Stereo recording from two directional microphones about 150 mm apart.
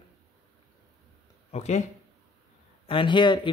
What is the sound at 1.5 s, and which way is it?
Speech, 45° left (ahead or behind).